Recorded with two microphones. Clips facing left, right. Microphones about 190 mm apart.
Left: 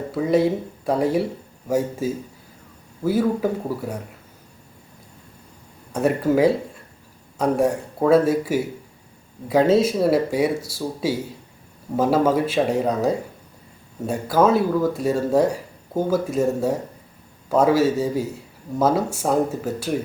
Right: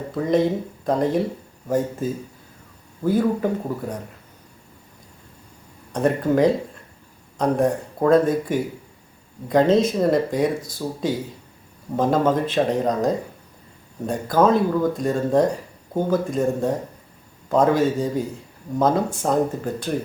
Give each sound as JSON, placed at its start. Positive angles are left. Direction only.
{"t": 0.1, "sound": "speech", "side_deg": 5}
{"t": 5.9, "sound": "speech", "side_deg": 5}